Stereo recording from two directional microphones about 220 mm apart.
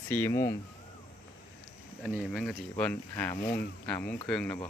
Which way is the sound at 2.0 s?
Centre (ahead or behind).